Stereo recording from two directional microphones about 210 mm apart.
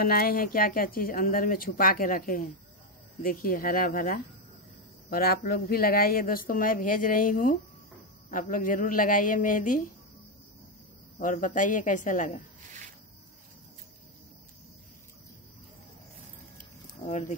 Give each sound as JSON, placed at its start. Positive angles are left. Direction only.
{"t": 0.0, "sound": "speech", "side_deg": 45}
{"t": 11.1, "sound": "speech", "side_deg": 40}